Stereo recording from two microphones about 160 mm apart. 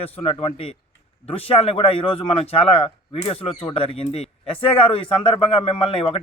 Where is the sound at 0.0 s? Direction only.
35° left (ahead or behind).